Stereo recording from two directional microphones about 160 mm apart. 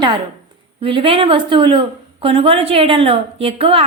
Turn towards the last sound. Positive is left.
turn(degrees=-35)  # may be behind; listen again after turning